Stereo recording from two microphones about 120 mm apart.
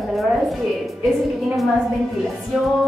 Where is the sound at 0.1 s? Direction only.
Centre (ahead or behind).